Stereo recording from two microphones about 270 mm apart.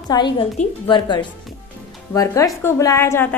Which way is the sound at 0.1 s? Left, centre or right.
Centre.